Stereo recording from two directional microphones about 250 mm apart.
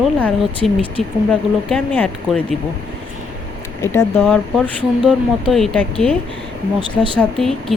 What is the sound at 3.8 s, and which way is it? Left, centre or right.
Speech, centre.